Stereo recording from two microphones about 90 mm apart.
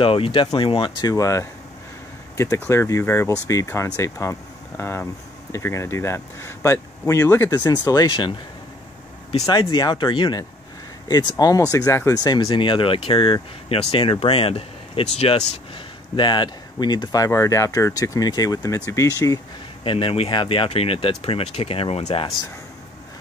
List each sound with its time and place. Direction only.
0.0 s speech: 85° left
1.0 s speech: 40° left (ahead or behind)
7.5 s speech: 50° left (ahead or behind)
9.5 s speech: 55° left (ahead or behind)
11.1 s speech: 50° left (ahead or behind); by 12.2 s 35° left (ahead or behind)
12.4 s speech: 75° left (ahead or behind)
16.2 s speech: 60° left (ahead or behind); by 19.4 s 40° left (ahead or behind)
19.8 s speech: 85° left